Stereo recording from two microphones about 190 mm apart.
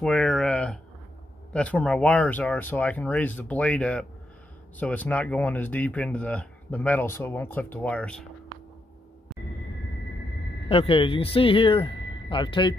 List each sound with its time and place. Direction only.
0.0 s a sound: 5° left (ahead or behind)
1.5 s speech: 5° left (ahead or behind)
10.7 s speech: 30° left (ahead or behind)